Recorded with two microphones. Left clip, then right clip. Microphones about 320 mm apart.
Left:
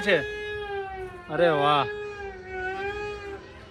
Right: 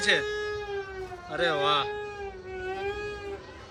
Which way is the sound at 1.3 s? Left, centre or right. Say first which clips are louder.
Left 4 dB; centre.